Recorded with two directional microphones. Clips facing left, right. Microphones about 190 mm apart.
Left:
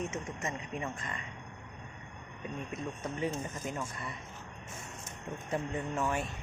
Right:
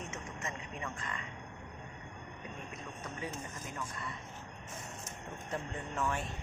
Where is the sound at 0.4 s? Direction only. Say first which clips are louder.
Left 3 dB; 20° left (ahead or behind).